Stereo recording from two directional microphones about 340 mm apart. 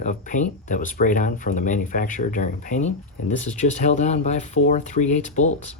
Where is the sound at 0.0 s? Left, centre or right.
Left.